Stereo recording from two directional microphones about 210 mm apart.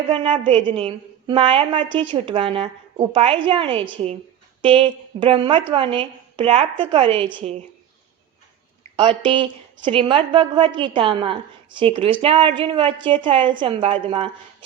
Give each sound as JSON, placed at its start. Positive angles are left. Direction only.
{"t": 0.1, "sound": "a woman's voice", "side_deg": -25}
{"t": 9.0, "sound": "a woman's voice", "side_deg": -25}